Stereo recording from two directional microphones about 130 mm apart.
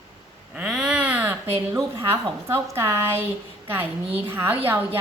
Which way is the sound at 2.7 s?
20° right (ahead or behind).